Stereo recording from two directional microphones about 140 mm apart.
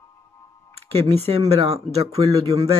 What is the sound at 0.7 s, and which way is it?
Speech, 45° right (ahead or behind).